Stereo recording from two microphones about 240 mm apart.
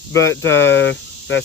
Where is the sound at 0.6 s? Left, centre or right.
Left.